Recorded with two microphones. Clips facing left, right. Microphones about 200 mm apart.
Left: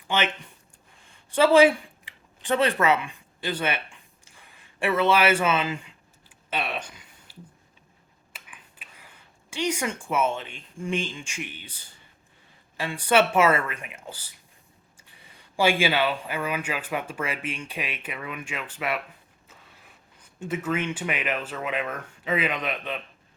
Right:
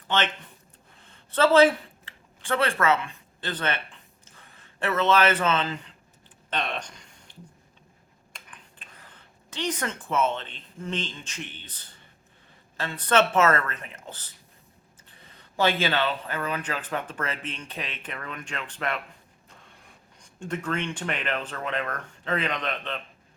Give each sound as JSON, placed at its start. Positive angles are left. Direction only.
{"t": 0.1, "sound": "speech", "side_deg": 10}
{"t": 1.3, "sound": "a man's voice", "side_deg": 10}
{"t": 6.5, "sound": "a sound", "side_deg": 5}
{"t": 8.3, "sound": "speech", "side_deg": 10}
{"t": 20.2, "sound": "speech", "side_deg": 5}